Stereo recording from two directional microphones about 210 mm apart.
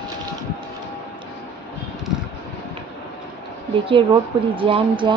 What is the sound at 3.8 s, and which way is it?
A woman's voice, 25° right (ahead or behind).